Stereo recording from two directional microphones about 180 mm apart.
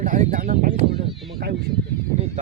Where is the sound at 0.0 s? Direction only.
50° right (ahead or behind).